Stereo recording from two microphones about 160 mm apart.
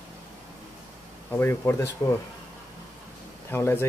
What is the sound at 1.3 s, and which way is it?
Speech, 15° left (ahead or behind).